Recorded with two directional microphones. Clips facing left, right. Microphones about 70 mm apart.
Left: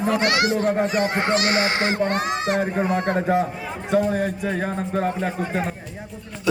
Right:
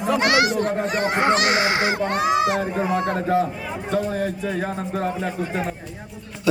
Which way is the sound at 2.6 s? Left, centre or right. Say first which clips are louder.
Even; centre.